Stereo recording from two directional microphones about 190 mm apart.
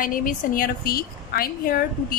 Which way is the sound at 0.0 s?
45° left (ahead or behind).